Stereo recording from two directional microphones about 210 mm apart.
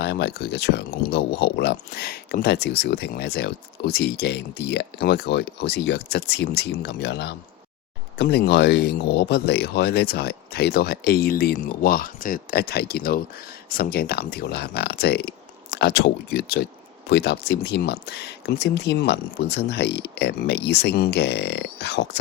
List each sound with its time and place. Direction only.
0.0 s speech: 50° left (ahead or behind)